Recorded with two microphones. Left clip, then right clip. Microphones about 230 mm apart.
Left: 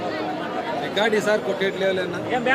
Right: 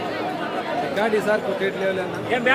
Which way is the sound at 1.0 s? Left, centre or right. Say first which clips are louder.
Left 1 dB; left.